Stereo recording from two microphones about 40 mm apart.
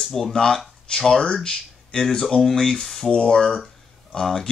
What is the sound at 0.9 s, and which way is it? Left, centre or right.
Speech, left.